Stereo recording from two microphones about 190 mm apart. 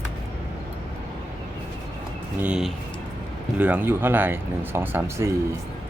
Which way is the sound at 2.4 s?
5° right (ahead or behind).